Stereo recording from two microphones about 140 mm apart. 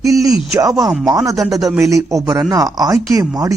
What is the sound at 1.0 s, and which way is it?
Speech, 25° right (ahead or behind).